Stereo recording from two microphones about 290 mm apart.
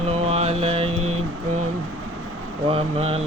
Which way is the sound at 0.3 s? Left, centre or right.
Right.